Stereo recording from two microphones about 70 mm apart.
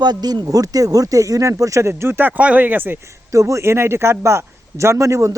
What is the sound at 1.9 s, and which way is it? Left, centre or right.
Speech, right.